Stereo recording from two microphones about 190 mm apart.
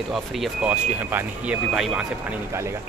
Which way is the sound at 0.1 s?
Centre (ahead or behind).